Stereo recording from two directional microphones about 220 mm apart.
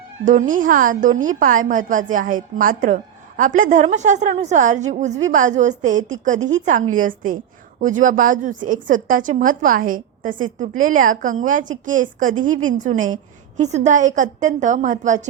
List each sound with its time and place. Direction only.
0.3 s a woman's voice: 35° right (ahead or behind)